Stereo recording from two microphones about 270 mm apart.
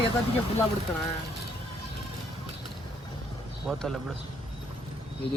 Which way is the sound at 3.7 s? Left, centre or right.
Centre.